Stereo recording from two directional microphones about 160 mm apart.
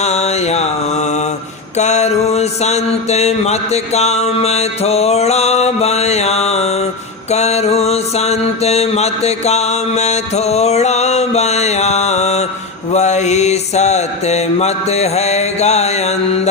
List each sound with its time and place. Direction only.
0.0 s mantra: 45° left (ahead or behind)
7.3 s music: 45° left (ahead or behind)
12.9 s mantra: 45° left (ahead or behind)